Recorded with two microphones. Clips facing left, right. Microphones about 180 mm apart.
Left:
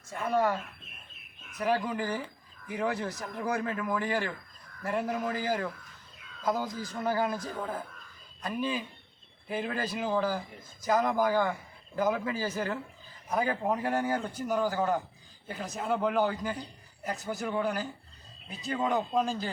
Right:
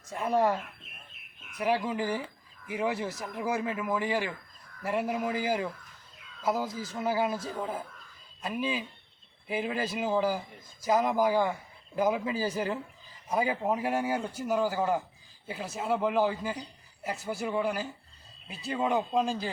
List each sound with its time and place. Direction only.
0.1 s speech: 20° right (ahead or behind)
1.5 s speech: 10° right (ahead or behind)